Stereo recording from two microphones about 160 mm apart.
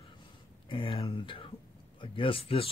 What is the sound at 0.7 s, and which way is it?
A man's voice, 35° left (ahead or behind).